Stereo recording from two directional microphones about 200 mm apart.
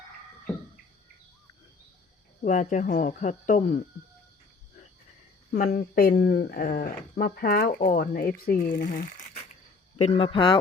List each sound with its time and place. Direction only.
2.4 s speech: 40° left (ahead or behind)
5.5 s speech: 40° left (ahead or behind)